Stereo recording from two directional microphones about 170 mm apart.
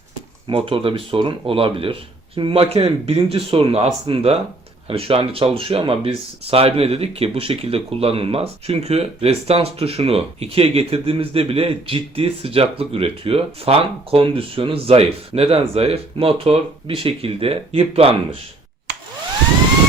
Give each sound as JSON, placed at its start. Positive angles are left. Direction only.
{"t": 0.4, "sound": "speech", "side_deg": -30}